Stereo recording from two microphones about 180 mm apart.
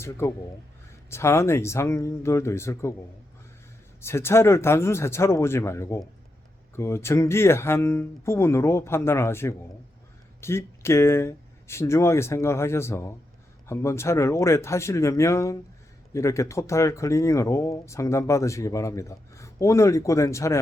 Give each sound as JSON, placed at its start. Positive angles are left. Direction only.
{"t": 0.0, "sound": "speech", "side_deg": 15}
{"t": 4.0, "sound": "speech", "side_deg": 15}